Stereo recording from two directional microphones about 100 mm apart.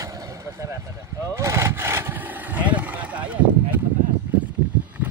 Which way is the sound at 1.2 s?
30° right (ahead or behind).